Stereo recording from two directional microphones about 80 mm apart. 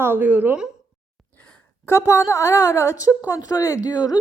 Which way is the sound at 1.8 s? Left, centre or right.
Left.